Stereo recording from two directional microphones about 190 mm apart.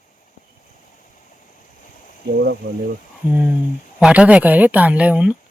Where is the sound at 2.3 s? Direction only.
65° right (ahead or behind).